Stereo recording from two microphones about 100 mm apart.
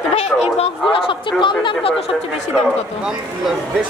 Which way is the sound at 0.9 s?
60° left (ahead or behind).